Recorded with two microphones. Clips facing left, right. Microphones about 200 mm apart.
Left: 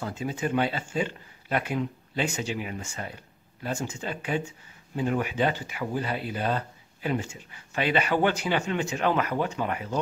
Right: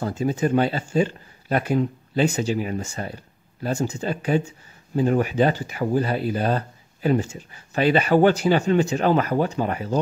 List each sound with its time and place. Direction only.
0.0 s speech: 40° right (ahead or behind)